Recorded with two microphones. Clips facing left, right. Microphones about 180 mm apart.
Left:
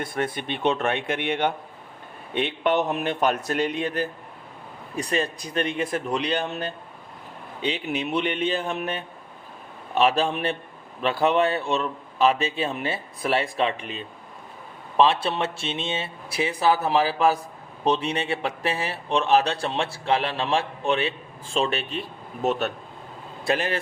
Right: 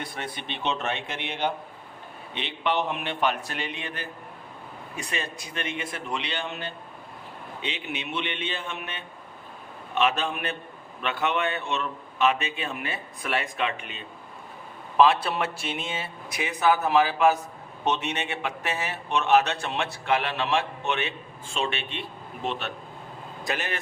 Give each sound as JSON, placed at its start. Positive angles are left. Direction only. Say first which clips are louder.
{"t": 0.0, "sound": "a man's voice", "louder": "left 7 dB", "side_deg": 50}
{"t": 23.4, "sound": "a man's voice", "louder": "left 6 dB", "side_deg": 30}